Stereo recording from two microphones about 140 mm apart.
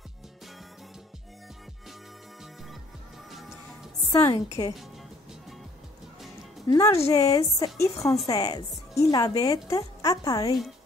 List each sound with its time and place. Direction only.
3.3 s music: centre (ahead or behind)
4.1 s a woman's voice: 20° left (ahead or behind)
6.7 s a woman's voice: 25° left (ahead or behind)
8.0 s a woman's voice: centre (ahead or behind)
8.3 s a woman's voice: 25° left (ahead or behind)